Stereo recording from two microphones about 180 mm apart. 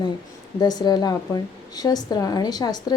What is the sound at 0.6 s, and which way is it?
A woman's voice, 20° left (ahead or behind).